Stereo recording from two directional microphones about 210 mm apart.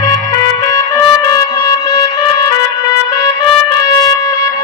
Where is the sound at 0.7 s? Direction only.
20° left (ahead or behind).